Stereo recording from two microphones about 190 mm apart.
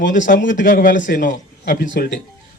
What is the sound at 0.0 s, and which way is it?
A man's voice, 40° left (ahead or behind).